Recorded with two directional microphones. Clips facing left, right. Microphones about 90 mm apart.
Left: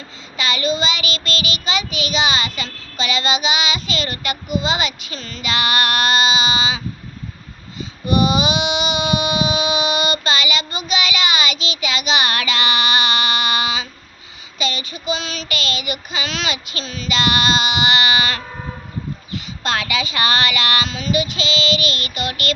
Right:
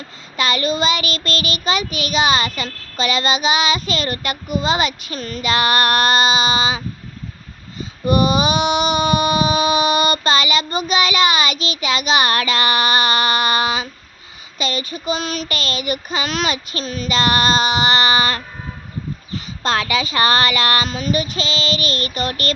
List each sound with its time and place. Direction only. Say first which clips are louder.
0.3 s child singing: right 2 dB; 45° right (ahead or behind)
19.3 s speech: right 3 dB; 35° right (ahead or behind)